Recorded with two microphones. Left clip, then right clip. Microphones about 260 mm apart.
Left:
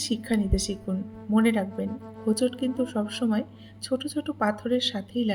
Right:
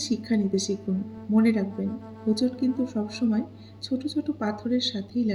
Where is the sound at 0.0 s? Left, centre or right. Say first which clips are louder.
Right 1 dB; left.